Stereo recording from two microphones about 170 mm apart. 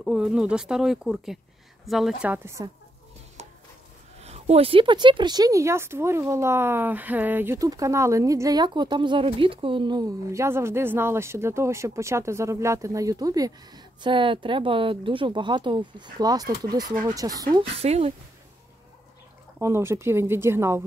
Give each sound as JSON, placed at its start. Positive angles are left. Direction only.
{"t": 0.0, "sound": "speech", "side_deg": -5}
{"t": 3.4, "sound": "a sound", "side_deg": -40}
{"t": 4.2, "sound": "speech", "side_deg": -40}
{"t": 19.6, "sound": "speech", "side_deg": -15}